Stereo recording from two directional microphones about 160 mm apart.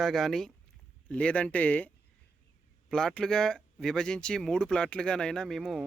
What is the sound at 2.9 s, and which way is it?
Speech, 5° left (ahead or behind).